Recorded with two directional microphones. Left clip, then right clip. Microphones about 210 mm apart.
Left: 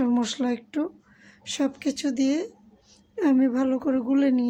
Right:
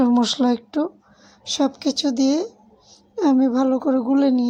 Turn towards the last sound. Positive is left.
turn(degrees=-10)  # may be behind; listen again after turning